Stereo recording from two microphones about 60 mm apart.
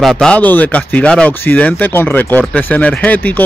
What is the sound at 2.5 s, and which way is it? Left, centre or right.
Speech, left.